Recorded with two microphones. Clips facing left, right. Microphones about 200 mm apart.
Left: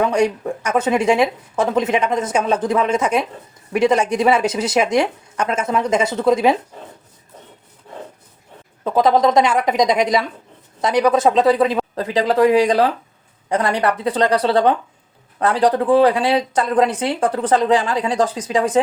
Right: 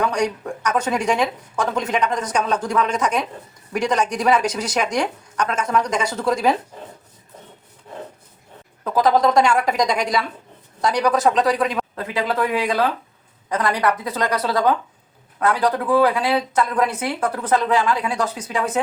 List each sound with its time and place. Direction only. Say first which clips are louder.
0.0 s speech: left 4 dB; 25° left (ahead or behind)
8.8 s speech: left 2 dB; 25° left (ahead or behind)